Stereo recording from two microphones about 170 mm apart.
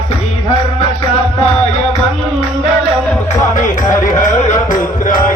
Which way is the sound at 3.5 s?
50° left (ahead or behind).